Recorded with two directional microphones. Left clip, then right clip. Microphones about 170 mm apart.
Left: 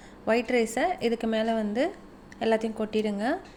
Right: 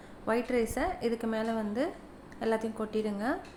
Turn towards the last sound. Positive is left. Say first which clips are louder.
# left 4 dB
turn(degrees=20)  # may be behind; listen again after turning